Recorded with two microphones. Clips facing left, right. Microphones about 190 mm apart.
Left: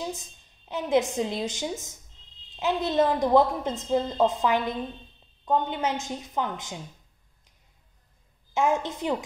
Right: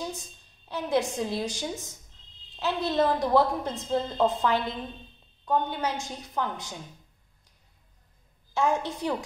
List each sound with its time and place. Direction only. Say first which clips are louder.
0.7 s a woman's voice: left 3 dB; 20° left (ahead or behind)
8.5 s a woman's voice: left 1 dB; 20° left (ahead or behind)